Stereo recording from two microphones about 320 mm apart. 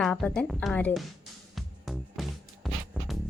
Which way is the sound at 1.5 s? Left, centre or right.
Centre.